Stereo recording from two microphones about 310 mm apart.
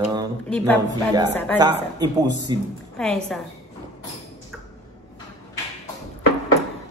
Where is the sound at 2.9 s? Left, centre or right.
Centre.